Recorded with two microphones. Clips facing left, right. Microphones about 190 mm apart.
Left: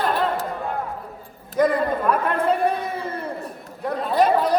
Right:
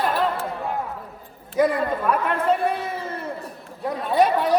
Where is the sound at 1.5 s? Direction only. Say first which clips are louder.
Left 1 dB; 5° right (ahead or behind).